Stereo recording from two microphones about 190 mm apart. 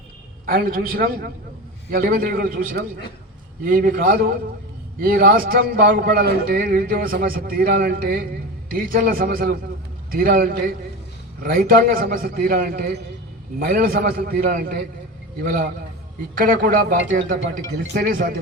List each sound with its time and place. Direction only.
0.4 s a man's voice: 50° right (ahead or behind)